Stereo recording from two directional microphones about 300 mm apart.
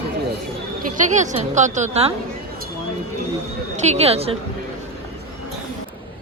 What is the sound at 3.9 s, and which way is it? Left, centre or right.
Speech, right.